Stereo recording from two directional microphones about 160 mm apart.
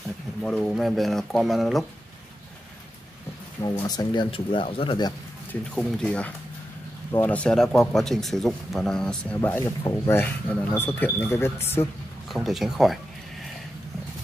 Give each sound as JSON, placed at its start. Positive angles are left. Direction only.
{"t": 0.4, "sound": "speech", "side_deg": 5}
{"t": 3.8, "sound": "speech", "side_deg": 25}
{"t": 5.5, "sound": "speech", "side_deg": 5}
{"t": 12.3, "sound": "speech", "side_deg": 0}